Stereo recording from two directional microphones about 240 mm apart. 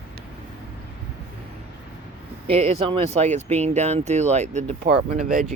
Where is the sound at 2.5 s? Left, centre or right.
Right.